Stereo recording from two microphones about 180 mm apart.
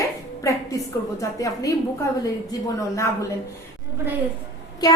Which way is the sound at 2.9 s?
15° left (ahead or behind).